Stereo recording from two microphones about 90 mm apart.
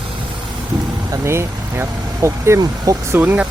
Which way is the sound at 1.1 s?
30° right (ahead or behind).